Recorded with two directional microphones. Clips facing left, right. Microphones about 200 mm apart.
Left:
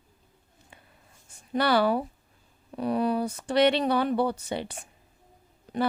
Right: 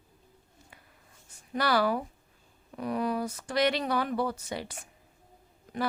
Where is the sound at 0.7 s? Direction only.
25° left (ahead or behind).